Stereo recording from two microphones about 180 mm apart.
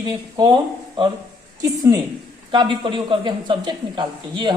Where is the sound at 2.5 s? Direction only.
30° right (ahead or behind).